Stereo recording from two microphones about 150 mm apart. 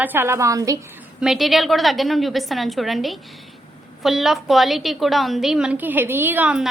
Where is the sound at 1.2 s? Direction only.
Centre (ahead or behind).